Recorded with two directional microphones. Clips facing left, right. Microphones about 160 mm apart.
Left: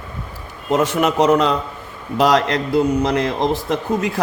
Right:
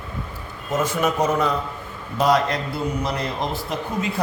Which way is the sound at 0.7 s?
70° left (ahead or behind).